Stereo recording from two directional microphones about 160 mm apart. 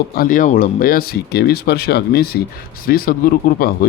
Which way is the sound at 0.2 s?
55° left (ahead or behind).